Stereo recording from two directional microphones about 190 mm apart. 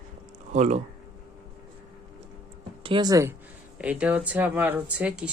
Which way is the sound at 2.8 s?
25° right (ahead or behind).